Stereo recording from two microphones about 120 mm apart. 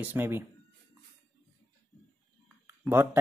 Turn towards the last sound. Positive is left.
turn(degrees=-20)  # may be behind; listen again after turning